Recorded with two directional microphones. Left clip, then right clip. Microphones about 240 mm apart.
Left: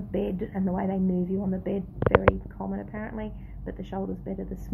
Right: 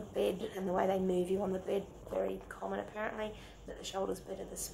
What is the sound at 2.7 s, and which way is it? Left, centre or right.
A woman's voice, centre.